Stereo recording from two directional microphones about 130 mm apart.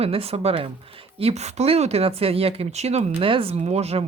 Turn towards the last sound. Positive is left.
turn(degrees=-50)  # may be behind; listen again after turning